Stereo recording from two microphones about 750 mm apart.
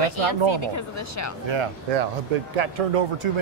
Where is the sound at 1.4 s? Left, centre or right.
Right.